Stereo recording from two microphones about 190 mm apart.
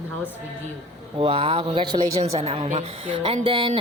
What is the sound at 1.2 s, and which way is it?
A woman's voice, 30° right (ahead or behind).